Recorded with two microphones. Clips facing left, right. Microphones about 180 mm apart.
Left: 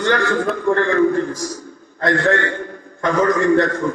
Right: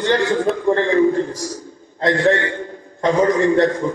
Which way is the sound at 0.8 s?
55° left (ahead or behind).